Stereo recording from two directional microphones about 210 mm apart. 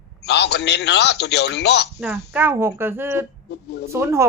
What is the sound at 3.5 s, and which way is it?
Speech, 55° left (ahead or behind).